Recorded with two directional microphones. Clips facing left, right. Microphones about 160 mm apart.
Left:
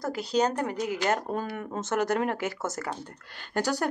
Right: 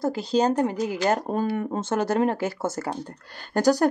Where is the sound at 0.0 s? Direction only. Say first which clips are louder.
Right 4 dB; 30° right (ahead or behind).